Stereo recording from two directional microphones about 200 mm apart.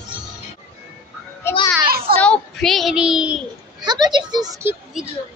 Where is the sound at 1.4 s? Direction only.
10° left (ahead or behind).